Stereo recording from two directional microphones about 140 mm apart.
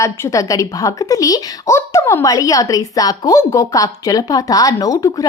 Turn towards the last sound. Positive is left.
turn(degrees=25)  # may be behind; listen again after turning